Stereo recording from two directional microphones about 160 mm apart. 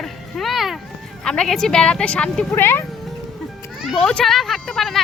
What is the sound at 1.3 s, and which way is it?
A woman's voice, 5° left (ahead or behind).